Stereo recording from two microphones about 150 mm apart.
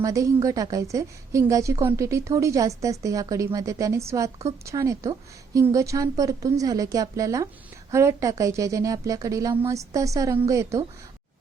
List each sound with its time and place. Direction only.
0.0 s a woman's voice: 20° right (ahead or behind)